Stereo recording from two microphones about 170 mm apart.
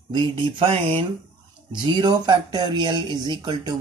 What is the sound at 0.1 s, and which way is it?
Speech, 25° right (ahead or behind).